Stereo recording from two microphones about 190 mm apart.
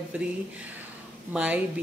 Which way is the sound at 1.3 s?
10° right (ahead or behind).